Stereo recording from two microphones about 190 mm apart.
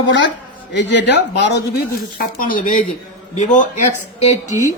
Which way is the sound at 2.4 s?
45° left (ahead or behind).